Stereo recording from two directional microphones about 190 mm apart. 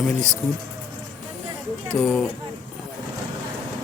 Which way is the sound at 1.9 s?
5° left (ahead or behind).